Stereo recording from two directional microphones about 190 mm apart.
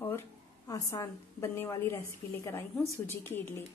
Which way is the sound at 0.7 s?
15° left (ahead or behind).